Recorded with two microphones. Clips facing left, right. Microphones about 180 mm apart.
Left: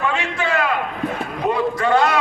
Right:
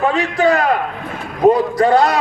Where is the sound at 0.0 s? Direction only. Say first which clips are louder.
Right 8 dB; 35° right (ahead or behind).